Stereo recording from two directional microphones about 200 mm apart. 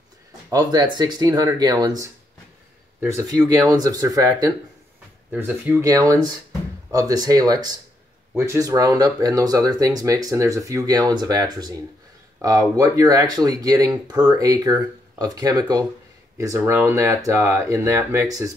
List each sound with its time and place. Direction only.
0.5 s speech: 20° right (ahead or behind)